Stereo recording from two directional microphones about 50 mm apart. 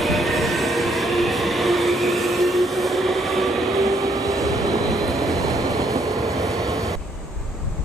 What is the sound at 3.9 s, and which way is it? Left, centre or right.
Train, right.